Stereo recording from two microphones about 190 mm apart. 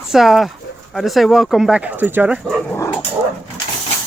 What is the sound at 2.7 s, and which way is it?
Dog, 15° left (ahead or behind).